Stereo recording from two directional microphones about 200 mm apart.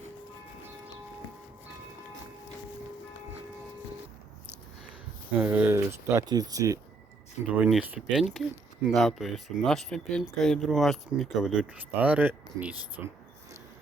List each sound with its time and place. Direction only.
5.4 s speech: 10° right (ahead or behind)
7.6 s speech: 5° right (ahead or behind)